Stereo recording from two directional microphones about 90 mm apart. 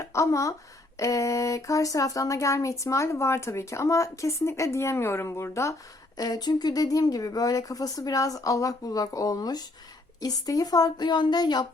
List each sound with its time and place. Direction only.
0.0 s a sound: 35° left (ahead or behind)
0.9 s speech: 35° left (ahead or behind)
6.1 s speech: 45° left (ahead or behind)